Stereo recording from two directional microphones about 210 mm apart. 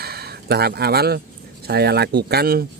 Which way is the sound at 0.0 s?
50° right (ahead or behind).